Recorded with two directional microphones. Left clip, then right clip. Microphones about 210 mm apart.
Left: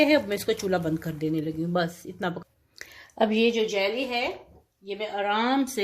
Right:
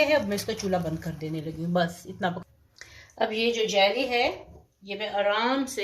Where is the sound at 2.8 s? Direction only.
50° left (ahead or behind).